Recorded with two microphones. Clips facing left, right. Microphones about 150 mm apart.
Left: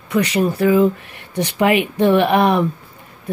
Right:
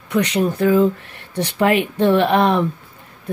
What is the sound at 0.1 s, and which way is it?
Speech, 5° left (ahead or behind).